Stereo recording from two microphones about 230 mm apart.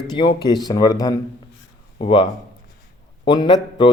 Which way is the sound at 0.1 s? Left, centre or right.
Centre.